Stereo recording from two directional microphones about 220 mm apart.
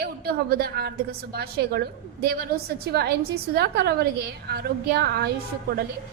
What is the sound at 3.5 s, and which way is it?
A woman's voice, 45° right (ahead or behind).